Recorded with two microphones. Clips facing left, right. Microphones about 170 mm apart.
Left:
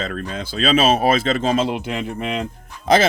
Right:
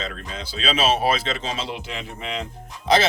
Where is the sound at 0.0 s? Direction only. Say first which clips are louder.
Left 6 dB; 55° left (ahead or behind).